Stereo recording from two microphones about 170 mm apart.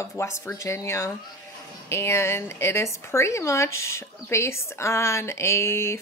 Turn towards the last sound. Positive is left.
turn(degrees=15)  # may be behind; listen again after turning